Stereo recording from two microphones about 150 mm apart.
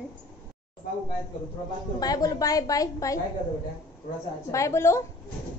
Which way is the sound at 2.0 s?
25° left (ahead or behind).